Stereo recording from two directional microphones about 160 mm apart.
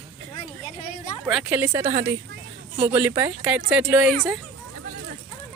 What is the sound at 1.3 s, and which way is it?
Speech, 5° right (ahead or behind).